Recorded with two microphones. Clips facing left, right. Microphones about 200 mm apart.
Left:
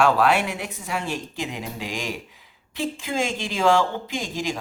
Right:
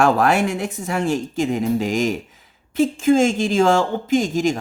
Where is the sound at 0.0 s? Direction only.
45° right (ahead or behind).